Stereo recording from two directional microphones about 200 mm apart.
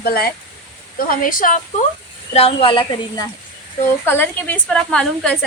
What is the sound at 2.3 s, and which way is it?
Speech, 30° left (ahead or behind).